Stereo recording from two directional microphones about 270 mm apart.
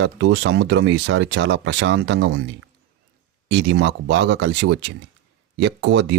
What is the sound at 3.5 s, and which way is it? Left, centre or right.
Speech, right.